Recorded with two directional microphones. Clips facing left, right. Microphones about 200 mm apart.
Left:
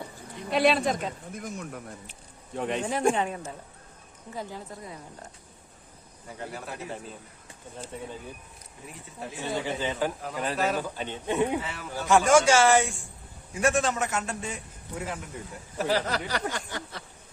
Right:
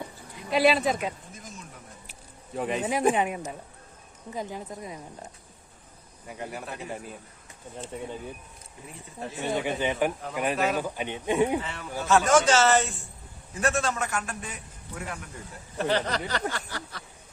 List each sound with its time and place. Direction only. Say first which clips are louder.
0.5 s speech: right 1 dB; centre (ahead or behind)
1.3 s speech: left 8 dB; 60° left (ahead or behind)
2.0 s a sound: even; centre (ahead or behind)
3.2 s speech: right 2 dB; 15° right (ahead or behind)
6.7 s speech: right 1 dB; centre (ahead or behind)
9.4 s speech: right 3 dB; 20° right (ahead or behind)
11.6 s a man's voice: right 1 dB; 5° left (ahead or behind); by 15.3 s 20° left (ahead or behind)
15.8 s speech: even; 5° left (ahead or behind)